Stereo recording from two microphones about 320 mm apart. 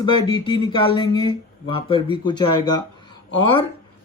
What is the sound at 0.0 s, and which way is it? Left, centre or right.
Speech, centre.